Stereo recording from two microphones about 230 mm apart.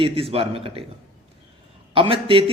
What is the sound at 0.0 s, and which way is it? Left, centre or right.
Speech, right.